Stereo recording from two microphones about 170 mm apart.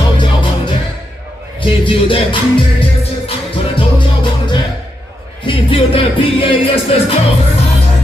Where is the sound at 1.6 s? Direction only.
30° left (ahead or behind).